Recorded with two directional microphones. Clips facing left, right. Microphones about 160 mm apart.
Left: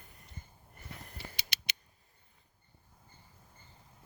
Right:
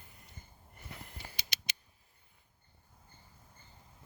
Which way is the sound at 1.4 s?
60° left (ahead or behind).